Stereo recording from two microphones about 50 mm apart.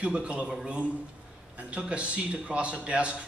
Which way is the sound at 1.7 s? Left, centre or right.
Right.